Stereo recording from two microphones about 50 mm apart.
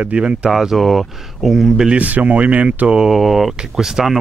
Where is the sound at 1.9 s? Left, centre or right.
Right.